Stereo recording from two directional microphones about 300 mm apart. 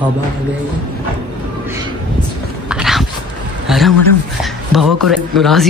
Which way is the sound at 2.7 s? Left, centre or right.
Centre.